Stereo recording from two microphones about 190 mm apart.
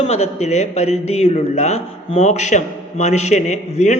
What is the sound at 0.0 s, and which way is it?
A man's voice, 35° left (ahead or behind).